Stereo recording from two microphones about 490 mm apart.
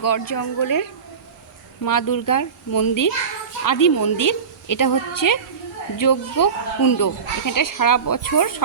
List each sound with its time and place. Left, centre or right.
0.0 s speech: left